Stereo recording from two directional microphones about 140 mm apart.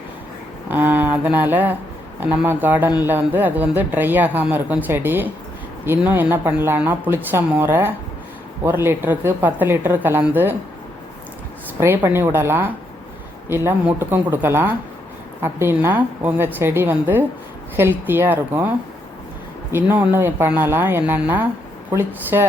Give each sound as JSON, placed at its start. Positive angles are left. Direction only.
{"t": 0.7, "sound": "speech", "side_deg": -15}
{"t": 11.8, "sound": "speech", "side_deg": -15}
{"t": 19.7, "sound": "speech", "side_deg": -15}